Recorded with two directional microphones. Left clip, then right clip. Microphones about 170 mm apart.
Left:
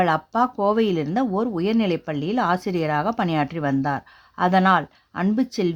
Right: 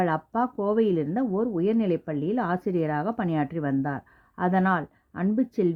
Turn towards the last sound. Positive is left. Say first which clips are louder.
# left 2 dB
turn(degrees=20)  # may be behind; listen again after turning